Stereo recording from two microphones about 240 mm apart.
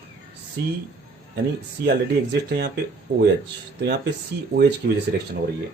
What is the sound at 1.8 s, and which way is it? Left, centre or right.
Speech, right.